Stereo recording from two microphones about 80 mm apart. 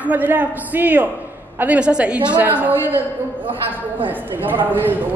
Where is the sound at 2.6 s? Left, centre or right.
Right.